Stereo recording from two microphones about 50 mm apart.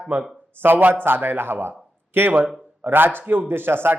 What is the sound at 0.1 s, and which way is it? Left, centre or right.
A man's voice, right.